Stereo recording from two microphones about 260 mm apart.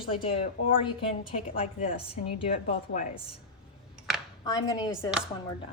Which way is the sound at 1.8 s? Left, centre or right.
Left.